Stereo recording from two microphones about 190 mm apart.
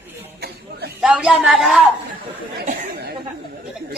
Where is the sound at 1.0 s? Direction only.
5° right (ahead or behind).